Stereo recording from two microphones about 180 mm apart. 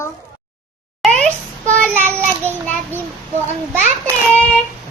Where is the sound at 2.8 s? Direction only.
10° right (ahead or behind).